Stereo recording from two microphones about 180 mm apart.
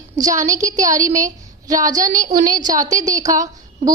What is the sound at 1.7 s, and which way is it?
A woman's voice, 20° right (ahead or behind).